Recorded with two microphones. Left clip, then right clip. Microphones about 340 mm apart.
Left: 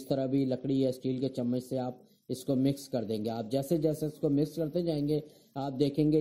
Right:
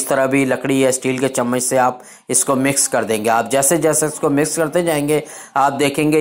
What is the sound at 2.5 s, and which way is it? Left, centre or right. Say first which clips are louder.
Speech: right 13 dB; right.